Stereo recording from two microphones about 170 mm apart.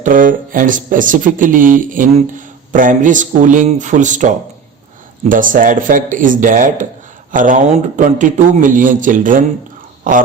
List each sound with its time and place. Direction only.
0.0 s a man's voice: 50° right (ahead or behind)
5.3 s a man's voice: 50° right (ahead or behind)